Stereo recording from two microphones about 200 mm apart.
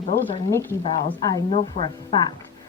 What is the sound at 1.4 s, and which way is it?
Speech, 30° left (ahead or behind).